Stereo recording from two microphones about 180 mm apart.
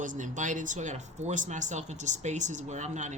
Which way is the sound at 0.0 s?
45° right (ahead or behind).